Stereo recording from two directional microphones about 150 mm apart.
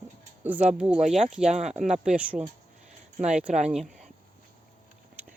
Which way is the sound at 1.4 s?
50° right (ahead or behind).